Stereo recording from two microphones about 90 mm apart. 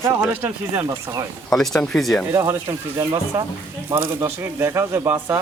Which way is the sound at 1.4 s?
5° left (ahead or behind).